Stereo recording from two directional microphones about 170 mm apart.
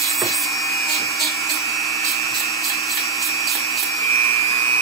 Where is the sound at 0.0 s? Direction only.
Centre (ahead or behind).